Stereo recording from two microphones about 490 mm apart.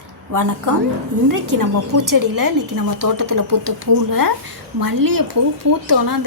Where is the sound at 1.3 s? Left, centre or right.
Right.